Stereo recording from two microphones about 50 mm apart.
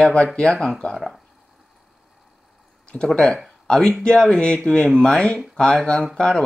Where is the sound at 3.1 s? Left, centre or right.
Centre.